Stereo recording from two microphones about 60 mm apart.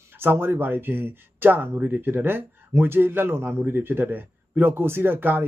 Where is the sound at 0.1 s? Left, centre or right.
Right.